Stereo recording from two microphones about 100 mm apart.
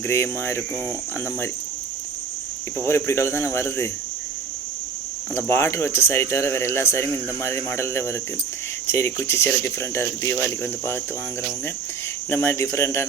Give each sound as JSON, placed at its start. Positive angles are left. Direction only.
{"t": 0.1, "sound": "speech", "side_deg": 25}
{"t": 2.7, "sound": "speech", "side_deg": 25}
{"t": 5.3, "sound": "speech", "side_deg": 25}
{"t": 12.3, "sound": "speech", "side_deg": 25}